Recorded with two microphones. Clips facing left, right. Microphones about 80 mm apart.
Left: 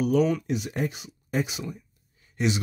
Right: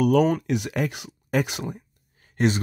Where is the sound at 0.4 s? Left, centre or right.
Right.